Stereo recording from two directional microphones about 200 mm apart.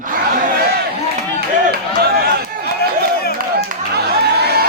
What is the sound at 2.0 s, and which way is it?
Speech, 50° right (ahead or behind).